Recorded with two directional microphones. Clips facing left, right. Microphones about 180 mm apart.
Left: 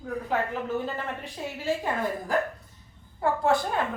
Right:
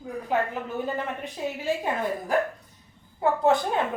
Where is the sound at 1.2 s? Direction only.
20° right (ahead or behind).